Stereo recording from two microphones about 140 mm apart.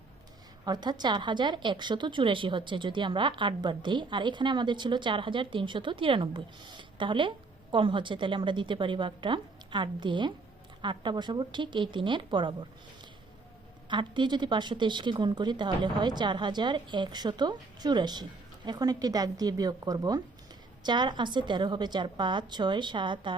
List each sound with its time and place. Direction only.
0.6 s a woman's voice: 30° right (ahead or behind)
13.9 s a woman's voice: 35° right (ahead or behind)